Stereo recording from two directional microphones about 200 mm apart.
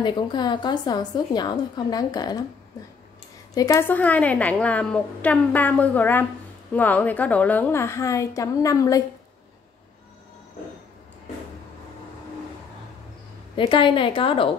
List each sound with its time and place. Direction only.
0.0 s a woman's voice: 20° left (ahead or behind)
3.5 s a woman's voice: 15° left (ahead or behind)
13.6 s a woman's voice: 25° left (ahead or behind)